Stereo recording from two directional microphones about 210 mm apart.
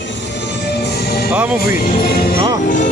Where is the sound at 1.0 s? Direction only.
50° left (ahead or behind).